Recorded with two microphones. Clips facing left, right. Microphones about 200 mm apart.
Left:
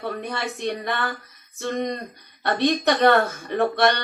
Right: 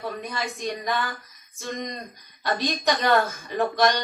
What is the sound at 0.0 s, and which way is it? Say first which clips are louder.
Speech: left 2 dB; 65° left (ahead or behind).